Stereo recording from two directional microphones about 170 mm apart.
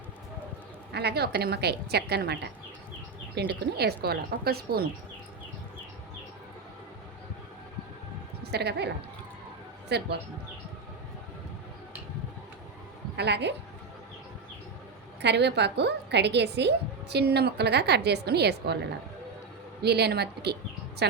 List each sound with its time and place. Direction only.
0.9 s a woman's voice: 75° right (ahead or behind)
3.6 s a woman's voice: 70° right (ahead or behind)
8.4 s a woman's voice: 75° right (ahead or behind)
9.9 s a woman's voice: 75° right (ahead or behind)
13.1 s a woman's voice: 80° right
15.2 s a woman's voice: 85° right
19.8 s a woman's voice: 75° right (ahead or behind)